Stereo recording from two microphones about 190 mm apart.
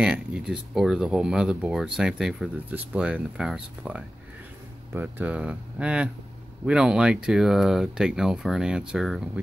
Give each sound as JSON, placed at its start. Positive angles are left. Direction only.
{"t": 0.0, "sound": "speech", "side_deg": -5}